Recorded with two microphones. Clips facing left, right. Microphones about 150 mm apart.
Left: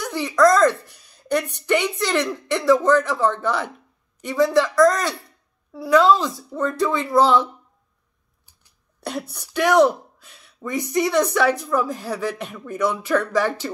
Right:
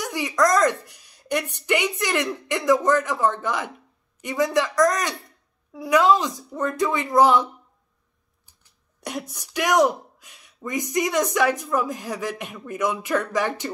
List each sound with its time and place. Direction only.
0.0 s a woman's voice: 15° right (ahead or behind)
9.3 s a woman's voice: 15° right (ahead or behind)